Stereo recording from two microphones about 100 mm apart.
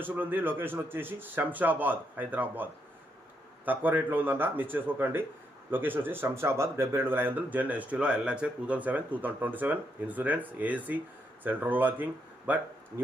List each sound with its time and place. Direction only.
0.0 s speech: 20° right (ahead or behind)
3.7 s speech: 20° right (ahead or behind)